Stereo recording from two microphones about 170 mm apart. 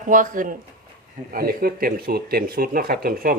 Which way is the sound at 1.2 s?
60° right (ahead or behind).